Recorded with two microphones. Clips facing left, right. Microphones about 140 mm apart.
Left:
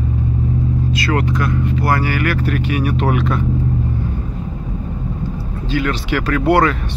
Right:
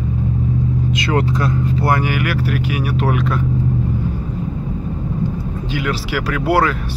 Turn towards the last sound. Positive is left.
turn(degrees=-5)  # may be behind; listen again after turning